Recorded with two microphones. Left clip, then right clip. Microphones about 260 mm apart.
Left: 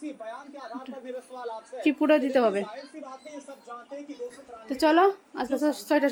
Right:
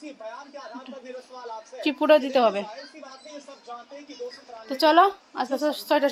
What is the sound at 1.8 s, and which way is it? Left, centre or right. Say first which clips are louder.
Speech: right 4 dB; centre.